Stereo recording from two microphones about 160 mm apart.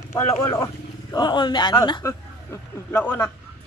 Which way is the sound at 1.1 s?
30° left (ahead or behind).